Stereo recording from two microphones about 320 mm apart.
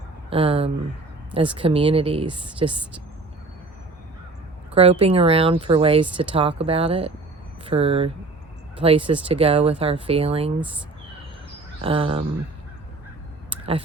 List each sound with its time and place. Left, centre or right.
0.3 s speech: centre
4.7 s speech: centre
11.8 s speech: centre